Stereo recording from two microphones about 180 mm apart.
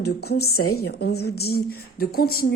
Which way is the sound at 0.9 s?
65° left (ahead or behind).